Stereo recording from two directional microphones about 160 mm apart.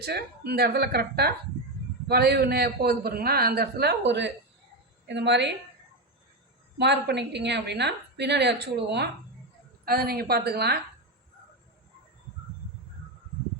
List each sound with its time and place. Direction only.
0.0 s a man's voice: 85° right
6.7 s a woman's voice: 90° right
9.8 s a woman's voice: 70° right (ahead or behind)